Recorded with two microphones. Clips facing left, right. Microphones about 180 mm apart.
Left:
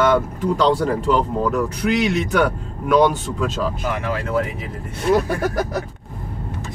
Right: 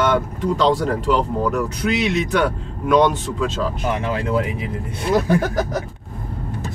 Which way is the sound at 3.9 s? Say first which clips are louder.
Right 1 dB; 20° right (ahead or behind).